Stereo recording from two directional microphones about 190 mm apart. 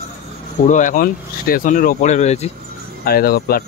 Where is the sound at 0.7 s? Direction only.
40° left (ahead or behind).